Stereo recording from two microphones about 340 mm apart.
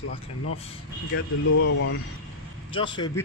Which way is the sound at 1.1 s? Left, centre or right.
Left.